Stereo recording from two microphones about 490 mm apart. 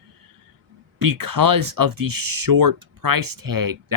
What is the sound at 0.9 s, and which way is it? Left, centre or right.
Speech, right.